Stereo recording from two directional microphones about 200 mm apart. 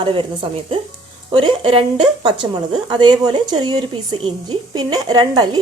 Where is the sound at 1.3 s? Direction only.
25° right (ahead or behind).